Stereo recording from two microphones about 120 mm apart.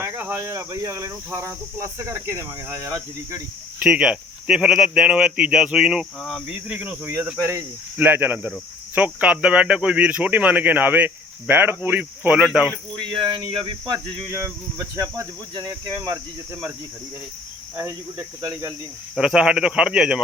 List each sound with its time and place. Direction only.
0.0 s speech: 20° right (ahead or behind)
3.8 s speech: 10° right (ahead or behind)
6.7 s speech: 15° right (ahead or behind)
13.0 s speech: 45° right (ahead or behind)
14.3 s speech: 25° right (ahead or behind)
17.7 s speech: 25° right (ahead or behind)
19.1 s speech: 5° right (ahead or behind)